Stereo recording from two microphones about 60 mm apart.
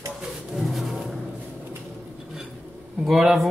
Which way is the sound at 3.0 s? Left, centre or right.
Centre.